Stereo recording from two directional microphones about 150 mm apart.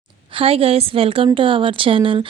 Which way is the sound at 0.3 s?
40° right (ahead or behind).